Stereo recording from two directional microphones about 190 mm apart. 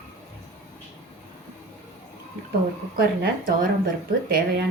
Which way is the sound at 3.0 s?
50° right (ahead or behind).